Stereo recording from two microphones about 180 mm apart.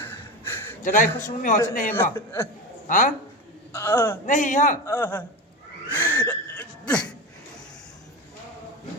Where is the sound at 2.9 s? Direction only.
45° left (ahead or behind).